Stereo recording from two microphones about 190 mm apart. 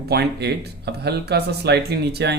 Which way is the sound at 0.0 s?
60° right (ahead or behind).